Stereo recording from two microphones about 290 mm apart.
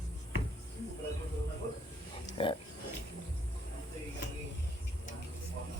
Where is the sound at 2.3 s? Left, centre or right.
Centre.